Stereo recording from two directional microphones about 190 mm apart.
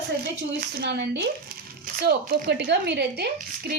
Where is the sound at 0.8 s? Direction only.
70° right (ahead or behind).